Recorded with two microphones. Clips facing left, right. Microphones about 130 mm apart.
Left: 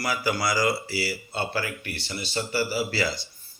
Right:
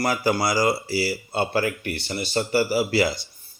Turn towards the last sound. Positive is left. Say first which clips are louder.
# right 6 dB
turn(degrees=-15)  # may be behind; listen again after turning